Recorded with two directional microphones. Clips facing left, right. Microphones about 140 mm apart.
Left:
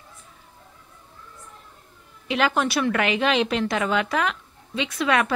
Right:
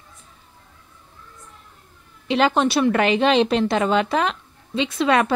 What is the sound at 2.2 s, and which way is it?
A woman's voice, 30° right (ahead or behind).